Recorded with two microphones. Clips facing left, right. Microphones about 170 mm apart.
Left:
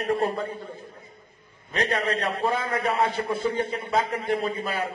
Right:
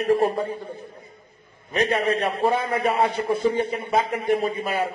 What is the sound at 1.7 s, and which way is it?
A man's voice, 25° right (ahead or behind).